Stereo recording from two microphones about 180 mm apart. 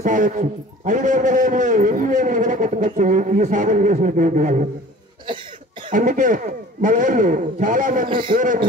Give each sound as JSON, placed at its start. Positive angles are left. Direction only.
{"t": 0.0, "sound": "a man's voice", "side_deg": -45}
{"t": 5.9, "sound": "a man's voice", "side_deg": -50}